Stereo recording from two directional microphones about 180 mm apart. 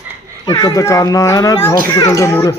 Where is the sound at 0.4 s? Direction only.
20° left (ahead or behind).